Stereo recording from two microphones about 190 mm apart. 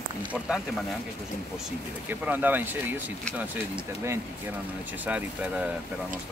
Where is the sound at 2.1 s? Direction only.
10° right (ahead or behind).